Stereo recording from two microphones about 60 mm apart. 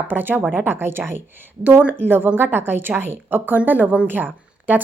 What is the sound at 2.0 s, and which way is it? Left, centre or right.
Speech, right.